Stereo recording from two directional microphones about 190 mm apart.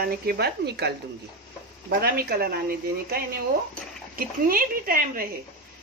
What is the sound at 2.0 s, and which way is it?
A woman's voice, 55° right (ahead or behind).